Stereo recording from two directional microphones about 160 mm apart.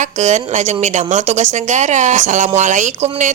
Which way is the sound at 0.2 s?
45° right (ahead or behind).